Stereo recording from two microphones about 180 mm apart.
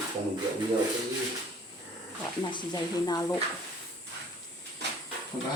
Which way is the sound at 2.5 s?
25° left (ahead or behind).